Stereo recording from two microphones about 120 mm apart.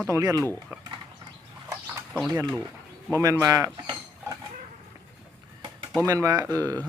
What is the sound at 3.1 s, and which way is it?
Speech, 25° right (ahead or behind).